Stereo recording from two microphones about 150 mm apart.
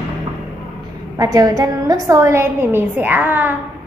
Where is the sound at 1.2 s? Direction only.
25° right (ahead or behind).